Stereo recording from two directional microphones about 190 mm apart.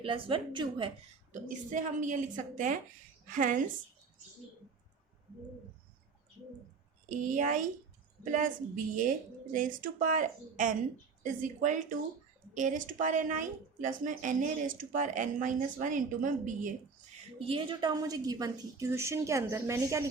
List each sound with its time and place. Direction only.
0.0 s a woman's voice: 25° right (ahead or behind)
1.3 s a woman's voice: 40° right (ahead or behind)
7.3 s speech: 45° right (ahead or behind)
17.4 s a woman's voice: 25° right (ahead or behind)